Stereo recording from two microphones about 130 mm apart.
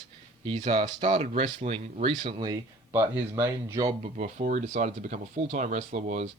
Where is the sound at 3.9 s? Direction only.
70° right (ahead or behind).